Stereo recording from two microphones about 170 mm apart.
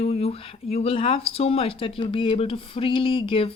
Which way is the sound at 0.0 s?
35° left (ahead or behind).